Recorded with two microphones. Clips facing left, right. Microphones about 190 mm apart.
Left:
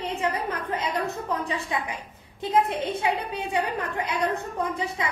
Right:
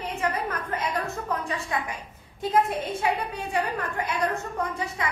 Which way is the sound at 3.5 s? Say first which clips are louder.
Left 1 dB; 15° left (ahead or behind).